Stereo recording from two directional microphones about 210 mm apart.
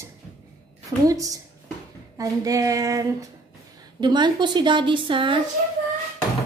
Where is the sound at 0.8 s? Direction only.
15° right (ahead or behind).